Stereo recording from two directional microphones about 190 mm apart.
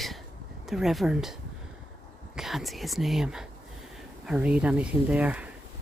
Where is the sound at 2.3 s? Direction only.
Centre (ahead or behind).